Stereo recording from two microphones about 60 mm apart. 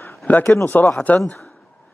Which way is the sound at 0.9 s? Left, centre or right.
Left.